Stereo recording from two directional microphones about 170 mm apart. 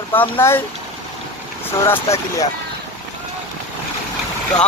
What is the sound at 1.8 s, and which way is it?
Speech, 15° left (ahead or behind).